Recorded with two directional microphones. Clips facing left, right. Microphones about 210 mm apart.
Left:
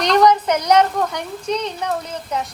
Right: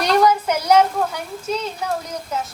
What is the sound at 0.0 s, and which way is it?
A child's voice, 10° right (ahead or behind).